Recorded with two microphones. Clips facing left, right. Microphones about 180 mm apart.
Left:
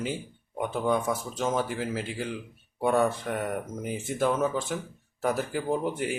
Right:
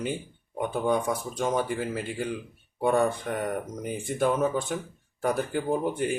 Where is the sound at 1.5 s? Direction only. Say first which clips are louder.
Right 1 dB; centre (ahead or behind).